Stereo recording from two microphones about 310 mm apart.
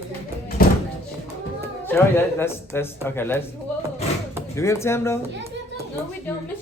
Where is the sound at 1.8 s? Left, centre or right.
Centre.